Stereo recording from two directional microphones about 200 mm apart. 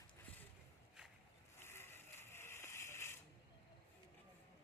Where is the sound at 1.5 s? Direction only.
10° left (ahead or behind).